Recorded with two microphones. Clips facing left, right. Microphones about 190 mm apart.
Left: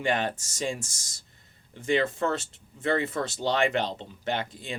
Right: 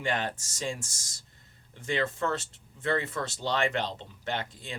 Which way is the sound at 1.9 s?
20° left (ahead or behind).